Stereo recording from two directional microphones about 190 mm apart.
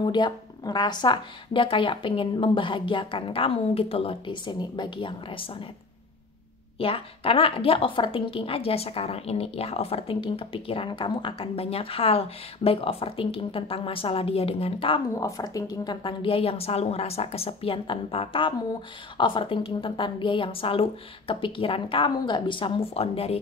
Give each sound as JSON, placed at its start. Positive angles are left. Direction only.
{"t": 0.0, "sound": "a woman's voice", "side_deg": 25}
{"t": 6.8, "sound": "a woman's voice", "side_deg": 30}
{"t": 15.1, "sound": "a woman's voice", "side_deg": 20}